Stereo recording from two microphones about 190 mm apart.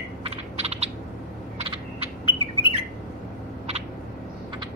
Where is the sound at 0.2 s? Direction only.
35° right (ahead or behind).